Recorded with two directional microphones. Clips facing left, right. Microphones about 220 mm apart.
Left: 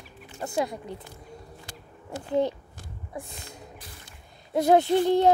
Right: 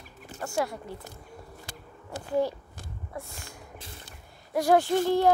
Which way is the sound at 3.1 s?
15° left (ahead or behind).